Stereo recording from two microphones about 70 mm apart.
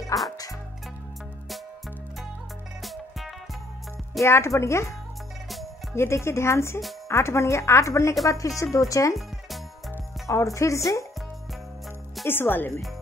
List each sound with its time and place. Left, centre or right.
0.1 s speech: left
2.8 s music: centre
4.2 s speech: left
5.9 s speech: left
10.2 s speech: left
12.3 s speech: left